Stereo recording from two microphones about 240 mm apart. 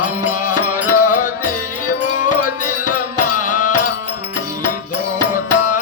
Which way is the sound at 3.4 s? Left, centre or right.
Left.